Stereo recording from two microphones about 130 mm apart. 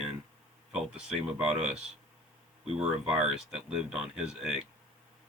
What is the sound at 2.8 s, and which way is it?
Speech, 5° right (ahead or behind).